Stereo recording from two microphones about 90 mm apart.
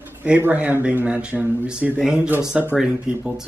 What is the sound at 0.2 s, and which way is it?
Speech, 20° right (ahead or behind).